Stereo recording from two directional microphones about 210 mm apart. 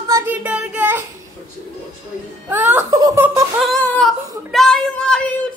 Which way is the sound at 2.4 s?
10° right (ahead or behind).